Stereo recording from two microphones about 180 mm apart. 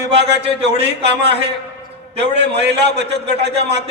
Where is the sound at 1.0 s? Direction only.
70° right (ahead or behind).